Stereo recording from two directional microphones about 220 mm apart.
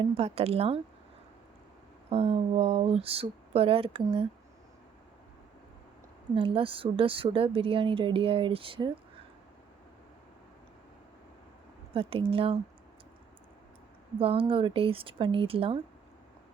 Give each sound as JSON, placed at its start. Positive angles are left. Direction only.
{"t": 0.0, "sound": "speech", "side_deg": -25}
{"t": 2.0, "sound": "speech", "side_deg": -25}
{"t": 6.3, "sound": "speech", "side_deg": -25}
{"t": 11.9, "sound": "speech", "side_deg": -25}
{"t": 14.2, "sound": "speech", "side_deg": -25}